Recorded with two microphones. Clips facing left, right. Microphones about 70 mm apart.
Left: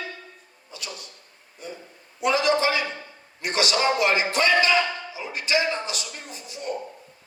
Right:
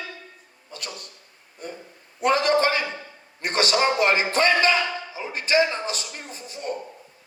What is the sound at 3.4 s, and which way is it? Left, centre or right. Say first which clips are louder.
A man's voice: right 1 dB; right.